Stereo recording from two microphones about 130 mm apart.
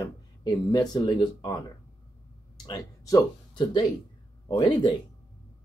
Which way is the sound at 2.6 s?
30° left (ahead or behind).